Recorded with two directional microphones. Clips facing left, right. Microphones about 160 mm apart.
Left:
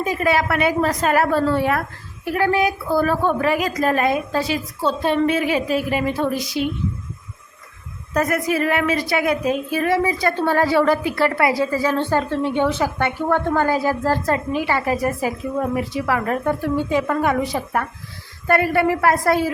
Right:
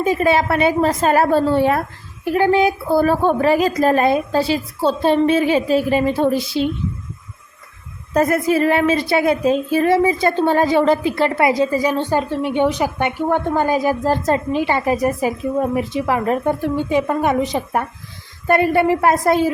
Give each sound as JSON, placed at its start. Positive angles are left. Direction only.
{"t": 0.0, "sound": "a woman's voice", "side_deg": -25}
{"t": 8.1, "sound": "a woman's voice", "side_deg": -30}